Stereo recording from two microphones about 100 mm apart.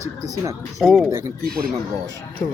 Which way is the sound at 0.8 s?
Centre (ahead or behind).